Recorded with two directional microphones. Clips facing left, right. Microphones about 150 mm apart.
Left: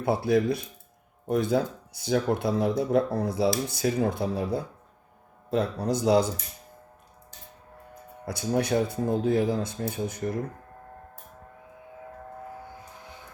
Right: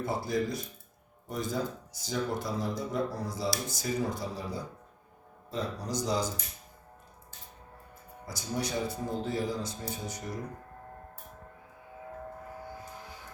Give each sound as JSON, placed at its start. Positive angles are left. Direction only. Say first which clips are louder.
{"t": 0.0, "sound": "speech", "louder": "left 7 dB", "side_deg": 60}
{"t": 8.2, "sound": "speech", "louder": "left 8 dB", "side_deg": 60}